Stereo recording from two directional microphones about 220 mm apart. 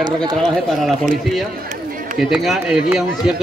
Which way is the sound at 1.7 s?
35° right (ahead or behind).